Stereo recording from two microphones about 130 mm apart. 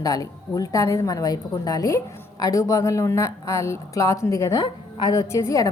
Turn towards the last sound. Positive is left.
turn(degrees=25)  # may be behind; listen again after turning